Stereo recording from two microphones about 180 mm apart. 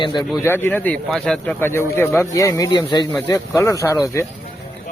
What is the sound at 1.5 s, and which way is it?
Speech, 15° left (ahead or behind).